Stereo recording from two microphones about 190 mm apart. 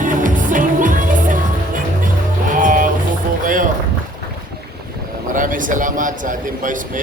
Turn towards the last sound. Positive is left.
turn(degrees=-45)  # may be behind; listen again after turning